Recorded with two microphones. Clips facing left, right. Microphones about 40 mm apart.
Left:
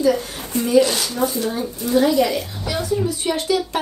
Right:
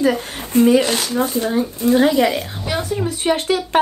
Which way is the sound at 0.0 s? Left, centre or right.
Right.